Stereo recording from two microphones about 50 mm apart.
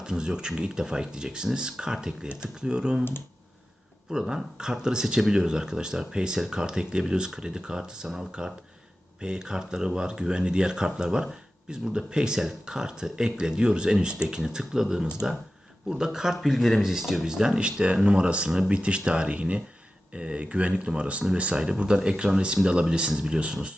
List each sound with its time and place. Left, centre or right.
0.0 s speech: centre
3.0 s speech: left
4.1 s speech: centre